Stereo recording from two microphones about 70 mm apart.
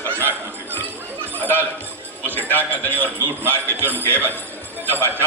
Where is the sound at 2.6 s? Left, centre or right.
Right.